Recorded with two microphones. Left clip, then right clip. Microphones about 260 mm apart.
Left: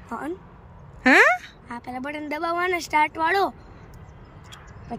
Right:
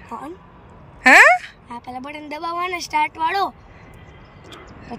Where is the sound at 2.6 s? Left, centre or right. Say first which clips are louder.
Right 1 dB; centre.